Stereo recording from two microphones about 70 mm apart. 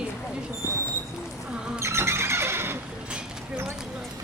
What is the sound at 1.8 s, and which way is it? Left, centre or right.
Horse, right.